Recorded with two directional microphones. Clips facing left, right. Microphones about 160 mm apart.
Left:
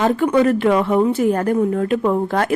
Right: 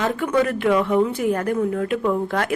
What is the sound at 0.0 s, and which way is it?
A woman's voice, 35° left (ahead or behind).